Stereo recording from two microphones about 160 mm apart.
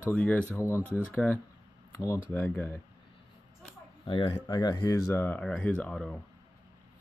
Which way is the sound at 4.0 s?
30° left (ahead or behind).